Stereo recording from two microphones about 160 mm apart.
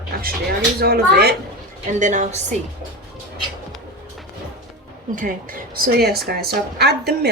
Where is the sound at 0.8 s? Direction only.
80° right.